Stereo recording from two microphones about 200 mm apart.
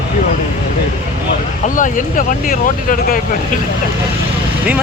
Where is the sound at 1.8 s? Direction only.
40° left (ahead or behind).